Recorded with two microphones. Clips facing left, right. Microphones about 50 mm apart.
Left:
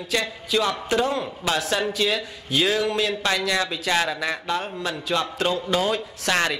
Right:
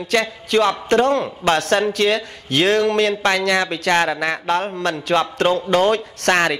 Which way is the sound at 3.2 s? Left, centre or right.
Right.